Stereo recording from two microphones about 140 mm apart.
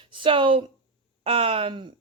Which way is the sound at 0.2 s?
35° right (ahead or behind).